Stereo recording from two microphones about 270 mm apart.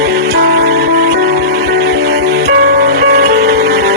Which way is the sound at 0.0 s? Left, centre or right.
Right.